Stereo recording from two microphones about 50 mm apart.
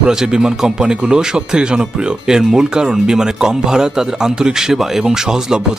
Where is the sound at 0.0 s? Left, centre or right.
Centre.